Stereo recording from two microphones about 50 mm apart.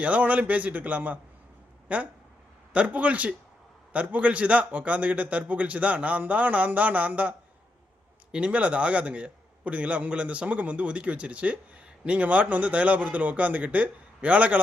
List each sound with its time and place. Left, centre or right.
0.0 s a man's voice: right